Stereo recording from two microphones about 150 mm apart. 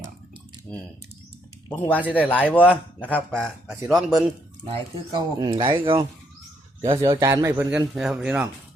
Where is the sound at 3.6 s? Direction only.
20° right (ahead or behind).